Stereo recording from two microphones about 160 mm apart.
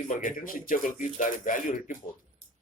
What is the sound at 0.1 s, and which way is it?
Speech, 55° left (ahead or behind).